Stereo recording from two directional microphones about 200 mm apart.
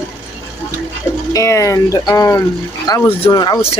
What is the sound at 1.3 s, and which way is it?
Speech, 15° left (ahead or behind).